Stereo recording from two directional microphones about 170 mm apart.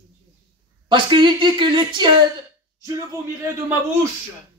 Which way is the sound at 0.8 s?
30° right (ahead or behind).